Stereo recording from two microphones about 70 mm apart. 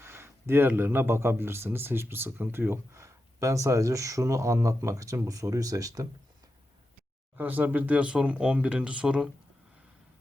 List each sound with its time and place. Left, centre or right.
0.0 s speech: right
7.3 s speech: right